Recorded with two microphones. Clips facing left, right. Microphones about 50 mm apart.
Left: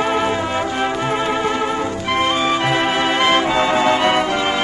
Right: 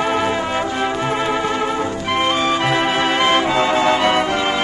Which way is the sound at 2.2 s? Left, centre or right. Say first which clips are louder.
Even; right.